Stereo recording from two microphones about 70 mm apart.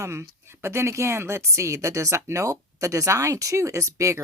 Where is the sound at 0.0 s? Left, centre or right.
Right.